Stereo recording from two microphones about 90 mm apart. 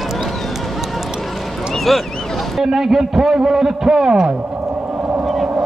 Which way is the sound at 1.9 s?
Centre (ahead or behind).